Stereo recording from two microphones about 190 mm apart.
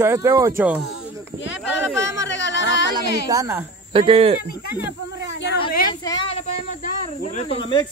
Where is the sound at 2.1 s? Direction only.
70° left (ahead or behind).